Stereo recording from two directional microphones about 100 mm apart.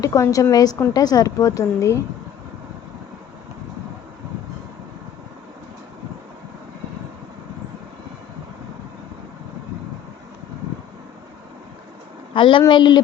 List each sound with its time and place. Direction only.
0.0 s speech: 35° left (ahead or behind)
12.3 s a woman's voice: 55° left (ahead or behind)